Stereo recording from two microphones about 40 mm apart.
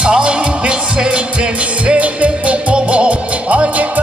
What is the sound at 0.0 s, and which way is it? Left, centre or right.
Music, right.